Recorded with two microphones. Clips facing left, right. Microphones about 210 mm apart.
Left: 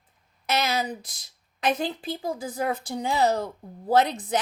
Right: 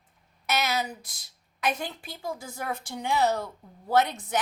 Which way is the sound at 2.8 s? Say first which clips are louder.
Even; 35° left (ahead or behind).